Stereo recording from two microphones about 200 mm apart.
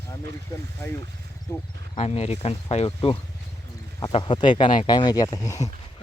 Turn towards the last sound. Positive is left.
turn(degrees=15)  # may be behind; listen again after turning